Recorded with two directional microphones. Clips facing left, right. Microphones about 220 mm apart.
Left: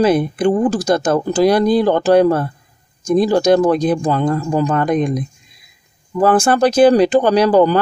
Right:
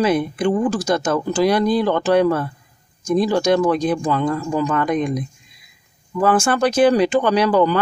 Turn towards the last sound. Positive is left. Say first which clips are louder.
# left 4 dB
turn(degrees=40)  # may be behind; listen again after turning